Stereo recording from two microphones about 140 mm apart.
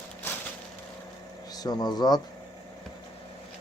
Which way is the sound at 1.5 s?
30° left (ahead or behind).